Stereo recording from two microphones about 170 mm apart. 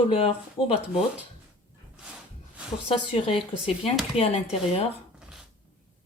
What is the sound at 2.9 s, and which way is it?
Speech, 35° left (ahead or behind).